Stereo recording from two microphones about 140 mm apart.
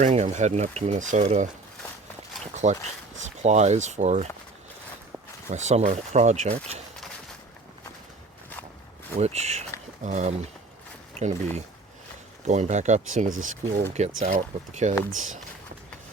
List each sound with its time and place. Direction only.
0.0 s speech: 55° right (ahead or behind)
2.6 s speech: 55° right (ahead or behind)
5.5 s speech: 55° right (ahead or behind)
9.1 s speech: 50° right (ahead or behind)
11.1 s a sound: 55° right (ahead or behind)
12.5 s speech: 55° right (ahead or behind)